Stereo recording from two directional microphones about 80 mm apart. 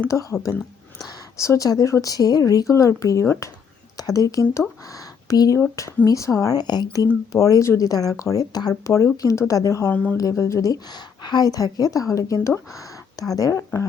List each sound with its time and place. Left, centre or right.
0.1 s a woman's voice: left
1.4 s a woman's voice: left
3.9 s speech: left
4.9 s a sound: left
6.1 s a woman's voice: left
7.3 s a woman's voice: left
8.8 s a woman's voice: left
9.9 s speech: centre
10.2 s a woman's voice: left